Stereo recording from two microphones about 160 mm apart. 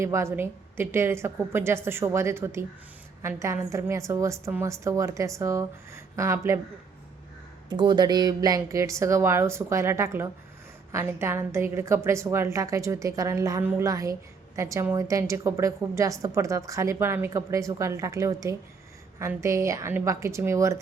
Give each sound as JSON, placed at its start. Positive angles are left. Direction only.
{"t": 0.0, "sound": "a woman's voice", "side_deg": -15}
{"t": 7.7, "sound": "a woman's voice", "side_deg": -25}